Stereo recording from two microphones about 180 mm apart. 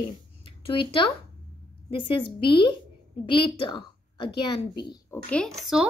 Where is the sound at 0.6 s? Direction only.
30° left (ahead or behind).